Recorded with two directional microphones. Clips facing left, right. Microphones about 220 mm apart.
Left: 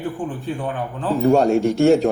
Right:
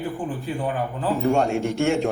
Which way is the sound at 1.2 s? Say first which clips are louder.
Left 7 dB; 40° left (ahead or behind).